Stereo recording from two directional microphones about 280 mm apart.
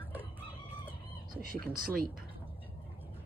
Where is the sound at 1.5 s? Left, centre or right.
Right.